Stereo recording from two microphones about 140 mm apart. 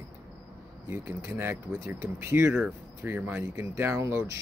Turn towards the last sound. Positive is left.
turn(degrees=-20)  # may be behind; listen again after turning